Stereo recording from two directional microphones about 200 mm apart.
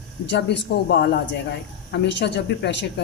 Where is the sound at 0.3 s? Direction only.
60° left (ahead or behind).